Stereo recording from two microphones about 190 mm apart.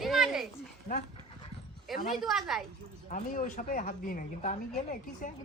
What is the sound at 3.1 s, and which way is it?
A woman's voice, 40° left (ahead or behind).